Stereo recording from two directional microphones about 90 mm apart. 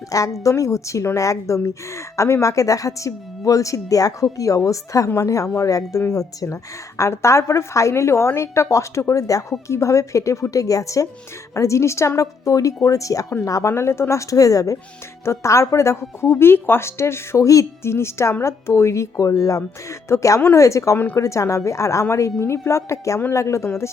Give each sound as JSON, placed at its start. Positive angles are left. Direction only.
{"t": 0.1, "sound": "a woman's voice", "side_deg": 40}